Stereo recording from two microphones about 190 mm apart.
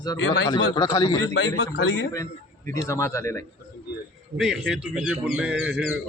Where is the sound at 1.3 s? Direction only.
80° left.